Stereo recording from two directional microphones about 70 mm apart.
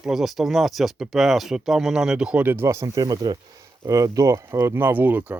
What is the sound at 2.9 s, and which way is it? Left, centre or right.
Speech, right.